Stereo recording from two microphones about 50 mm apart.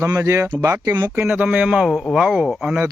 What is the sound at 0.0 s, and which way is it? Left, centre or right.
Speech, right.